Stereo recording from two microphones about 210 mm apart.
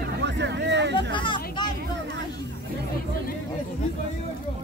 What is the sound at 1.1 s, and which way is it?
Speech, 25° left (ahead or behind).